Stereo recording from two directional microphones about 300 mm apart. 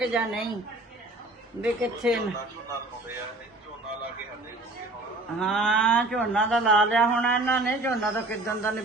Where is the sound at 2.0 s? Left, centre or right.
Centre.